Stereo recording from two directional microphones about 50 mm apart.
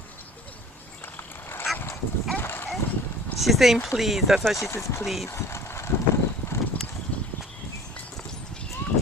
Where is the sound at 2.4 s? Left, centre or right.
Left.